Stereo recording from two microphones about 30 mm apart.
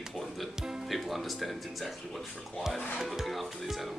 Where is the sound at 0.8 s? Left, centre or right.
Centre.